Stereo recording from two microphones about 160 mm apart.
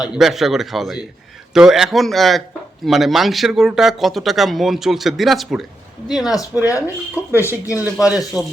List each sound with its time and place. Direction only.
0.0 s speech: 5° right (ahead or behind)
6.7 s speech: 20° left (ahead or behind)
7.9 s speech: 5° right (ahead or behind)